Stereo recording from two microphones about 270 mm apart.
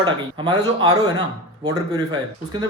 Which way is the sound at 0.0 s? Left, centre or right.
Centre.